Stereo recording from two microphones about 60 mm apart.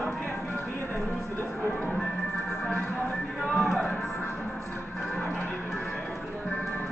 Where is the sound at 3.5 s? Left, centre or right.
Centre.